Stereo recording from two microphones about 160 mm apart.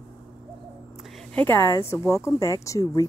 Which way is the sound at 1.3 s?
15° left (ahead or behind).